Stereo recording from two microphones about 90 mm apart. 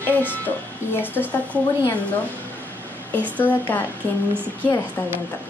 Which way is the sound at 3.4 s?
20° left (ahead or behind).